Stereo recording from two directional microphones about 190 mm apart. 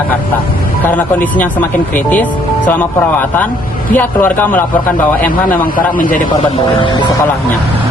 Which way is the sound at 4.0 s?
10° left (ahead or behind).